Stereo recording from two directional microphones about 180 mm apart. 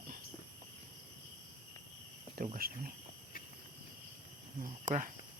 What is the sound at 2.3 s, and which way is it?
Speech, 50° right (ahead or behind).